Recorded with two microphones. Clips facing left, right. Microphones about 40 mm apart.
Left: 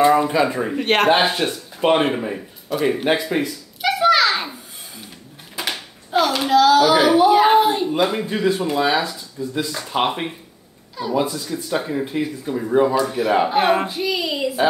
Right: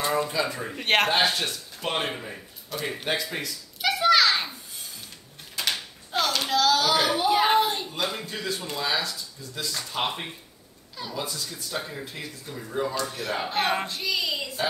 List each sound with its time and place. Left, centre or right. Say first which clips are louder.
0.0 s speech: left 10 dB; left
0.7 s a man's voice: left 5 dB; centre
1.1 s speech: left 6 dB; left
3.8 s a sound: left 5 dB; centre
5.6 s a child's voice: left 3 dB; centre
7.9 s speech: left 10 dB; left
12.9 s speech: left 11 dB; centre